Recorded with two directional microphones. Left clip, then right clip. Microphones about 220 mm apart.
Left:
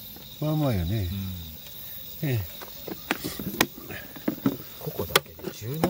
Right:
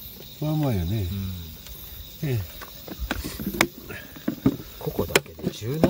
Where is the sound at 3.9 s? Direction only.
10° left (ahead or behind).